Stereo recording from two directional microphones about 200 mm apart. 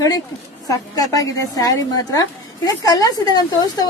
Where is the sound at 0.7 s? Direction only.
15° left (ahead or behind).